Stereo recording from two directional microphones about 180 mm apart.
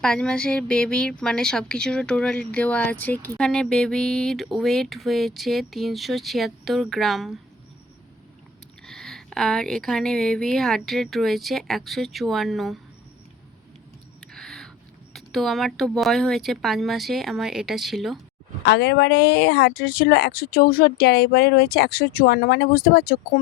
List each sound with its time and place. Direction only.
0.0 s speech: 5° left (ahead or behind)
8.9 s speech: centre (ahead or behind)
14.2 s a sound: 5° left (ahead or behind)
15.1 s speech: centre (ahead or behind)
18.6 s a woman's voice: 65° left (ahead or behind)